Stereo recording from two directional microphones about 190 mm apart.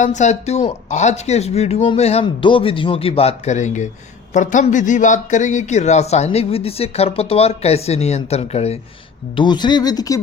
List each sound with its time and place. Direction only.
0.0 s a man's voice: 40° left (ahead or behind)
9.3 s speech: 25° left (ahead or behind)